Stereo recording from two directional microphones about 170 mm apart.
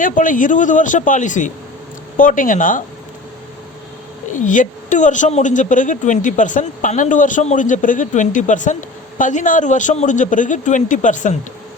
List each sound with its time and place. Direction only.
0.0 s speech: 50° left (ahead or behind)
4.3 s speech: 50° left (ahead or behind)